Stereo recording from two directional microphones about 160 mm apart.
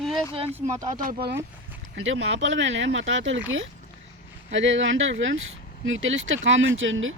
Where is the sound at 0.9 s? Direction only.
65° right (ahead or behind).